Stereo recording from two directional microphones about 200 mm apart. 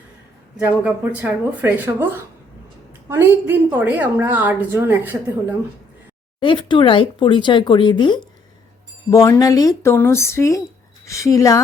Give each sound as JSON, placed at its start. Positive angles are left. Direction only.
{"t": 0.5, "sound": "a woman's voice", "side_deg": -10}
{"t": 3.1, "sound": "a woman's voice", "side_deg": -10}
{"t": 6.4, "sound": "a woman's voice", "side_deg": 25}